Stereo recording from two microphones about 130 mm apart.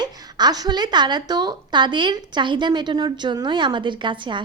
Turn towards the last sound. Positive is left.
turn(degrees=-40)  # may be behind; listen again after turning